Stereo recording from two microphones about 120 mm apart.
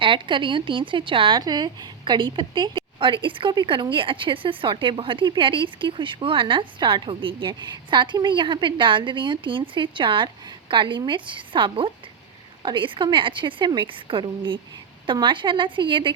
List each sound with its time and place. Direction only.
0.0 s a woman's voice: 45° right (ahead or behind)